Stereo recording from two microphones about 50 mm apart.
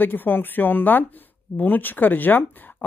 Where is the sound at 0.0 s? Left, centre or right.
Left.